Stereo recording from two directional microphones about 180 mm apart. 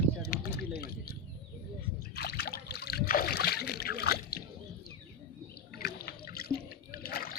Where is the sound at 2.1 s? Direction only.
65° left (ahead or behind).